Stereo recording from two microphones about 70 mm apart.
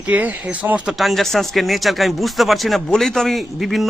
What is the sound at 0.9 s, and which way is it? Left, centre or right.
Speech, centre.